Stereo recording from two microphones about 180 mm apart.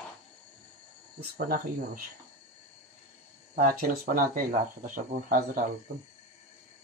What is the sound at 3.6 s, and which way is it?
Speech, 50° right (ahead or behind).